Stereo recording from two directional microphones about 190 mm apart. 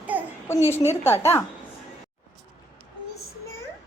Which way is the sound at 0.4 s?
15° left (ahead or behind).